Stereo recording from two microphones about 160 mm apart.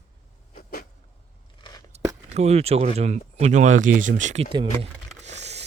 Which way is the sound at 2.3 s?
45° right (ahead or behind).